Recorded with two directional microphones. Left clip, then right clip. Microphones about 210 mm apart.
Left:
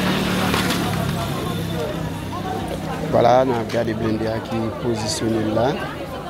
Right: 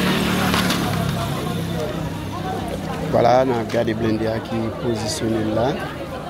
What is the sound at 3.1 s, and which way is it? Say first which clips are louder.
Speech: even; centre (ahead or behind).